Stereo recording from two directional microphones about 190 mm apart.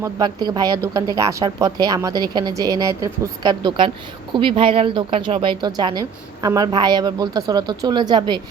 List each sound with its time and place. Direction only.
0.0 s speech: 20° right (ahead or behind)